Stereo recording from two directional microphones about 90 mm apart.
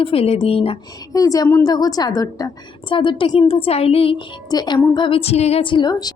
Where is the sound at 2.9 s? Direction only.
65° left (ahead or behind).